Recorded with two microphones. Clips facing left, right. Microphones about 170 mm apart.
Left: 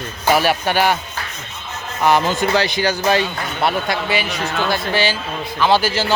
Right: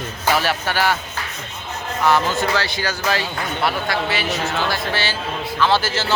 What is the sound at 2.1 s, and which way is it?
Speech, 15° left (ahead or behind).